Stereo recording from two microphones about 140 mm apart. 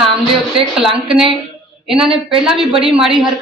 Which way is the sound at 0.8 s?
5° right (ahead or behind).